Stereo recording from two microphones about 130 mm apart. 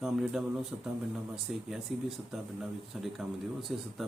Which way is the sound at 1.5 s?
5° right (ahead or behind).